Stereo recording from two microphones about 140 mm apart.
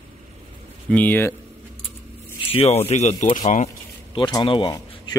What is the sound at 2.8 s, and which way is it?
Speech, 55° left (ahead or behind).